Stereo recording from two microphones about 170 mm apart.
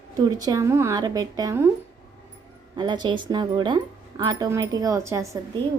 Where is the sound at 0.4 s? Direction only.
20° right (ahead or behind).